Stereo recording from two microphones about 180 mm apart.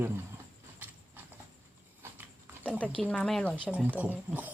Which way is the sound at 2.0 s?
10° right (ahead or behind).